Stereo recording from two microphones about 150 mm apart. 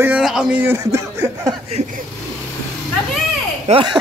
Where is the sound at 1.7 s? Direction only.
60° right (ahead or behind).